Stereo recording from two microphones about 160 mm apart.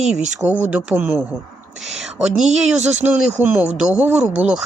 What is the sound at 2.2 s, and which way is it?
Speech, centre (ahead or behind).